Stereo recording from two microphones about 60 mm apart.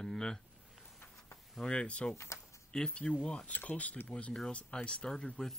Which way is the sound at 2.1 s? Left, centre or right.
Left.